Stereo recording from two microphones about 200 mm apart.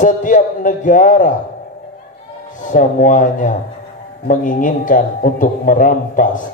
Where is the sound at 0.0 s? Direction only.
40° left (ahead or behind).